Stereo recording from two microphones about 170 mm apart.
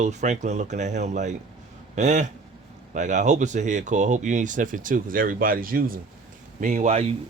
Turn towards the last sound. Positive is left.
turn(degrees=-40)  # may be behind; listen again after turning